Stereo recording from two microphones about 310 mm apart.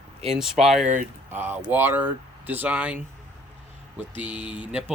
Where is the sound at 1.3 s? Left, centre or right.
Centre.